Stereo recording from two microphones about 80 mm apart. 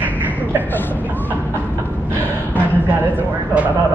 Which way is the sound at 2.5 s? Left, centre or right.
Left.